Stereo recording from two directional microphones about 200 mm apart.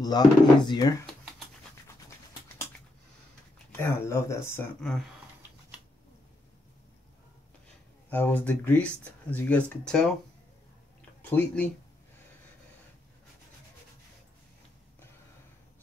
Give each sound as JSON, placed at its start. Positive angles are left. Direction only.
{"t": 0.0, "sound": "speech", "side_deg": 20}
{"t": 3.7, "sound": "speech", "side_deg": 15}
{"t": 8.1, "sound": "speech", "side_deg": 10}
{"t": 11.2, "sound": "speech", "side_deg": 5}